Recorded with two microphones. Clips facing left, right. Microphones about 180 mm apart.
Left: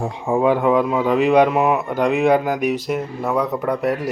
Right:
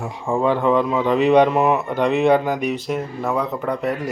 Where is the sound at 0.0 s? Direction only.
20° left (ahead or behind).